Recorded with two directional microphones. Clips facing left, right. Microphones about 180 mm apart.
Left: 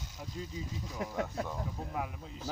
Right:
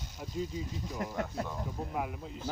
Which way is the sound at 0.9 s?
Centre (ahead or behind).